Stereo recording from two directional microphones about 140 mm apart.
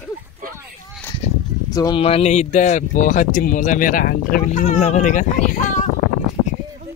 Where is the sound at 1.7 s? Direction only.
30° left (ahead or behind).